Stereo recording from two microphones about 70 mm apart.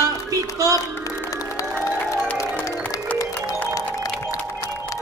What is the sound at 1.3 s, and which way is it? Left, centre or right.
Music, left.